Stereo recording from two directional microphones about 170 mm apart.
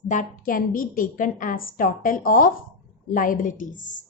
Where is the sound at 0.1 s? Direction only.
50° left (ahead or behind).